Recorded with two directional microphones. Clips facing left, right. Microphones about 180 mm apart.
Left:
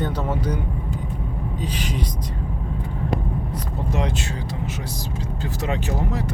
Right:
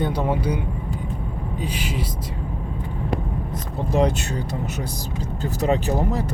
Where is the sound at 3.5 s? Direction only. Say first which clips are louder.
Right 8 dB; 40° right (ahead or behind).